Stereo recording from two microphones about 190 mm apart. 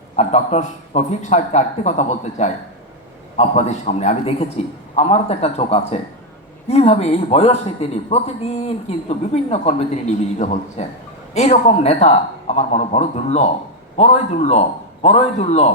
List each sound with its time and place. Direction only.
0.2 s a man's voice: 35° left (ahead or behind)